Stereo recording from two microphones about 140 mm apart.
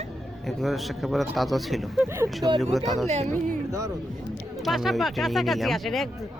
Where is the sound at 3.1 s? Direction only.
50° right (ahead or behind).